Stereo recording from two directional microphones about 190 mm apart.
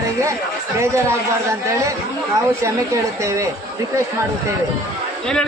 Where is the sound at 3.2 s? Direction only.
15° right (ahead or behind).